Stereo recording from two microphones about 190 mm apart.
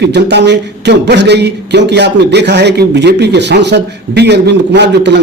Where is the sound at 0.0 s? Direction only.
65° right (ahead or behind).